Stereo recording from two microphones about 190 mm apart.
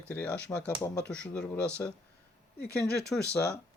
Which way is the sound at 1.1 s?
5° left (ahead or behind).